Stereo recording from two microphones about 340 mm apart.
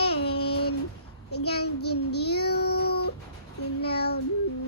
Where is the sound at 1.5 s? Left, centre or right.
Left.